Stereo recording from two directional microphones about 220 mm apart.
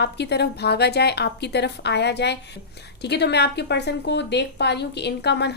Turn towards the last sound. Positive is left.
turn(degrees=50)  # may be behind; listen again after turning